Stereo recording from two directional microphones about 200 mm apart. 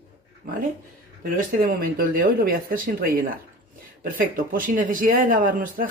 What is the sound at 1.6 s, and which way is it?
Speech, 45° right (ahead or behind).